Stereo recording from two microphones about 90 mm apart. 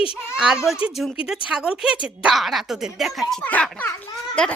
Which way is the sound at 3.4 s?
15° left (ahead or behind).